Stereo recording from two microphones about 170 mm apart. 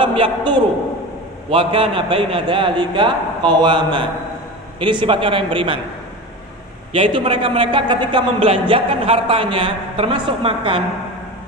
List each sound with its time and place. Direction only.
0.0 s a man's voice: 30° right (ahead or behind)
6.9 s a man's voice: 30° right (ahead or behind)